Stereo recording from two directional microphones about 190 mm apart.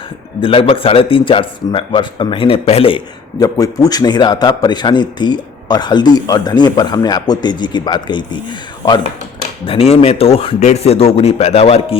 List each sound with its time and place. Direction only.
0.4 s a man's voice: 30° left (ahead or behind)
3.4 s a man's voice: 20° left (ahead or behind)
9.6 s a man's voice: 30° left (ahead or behind)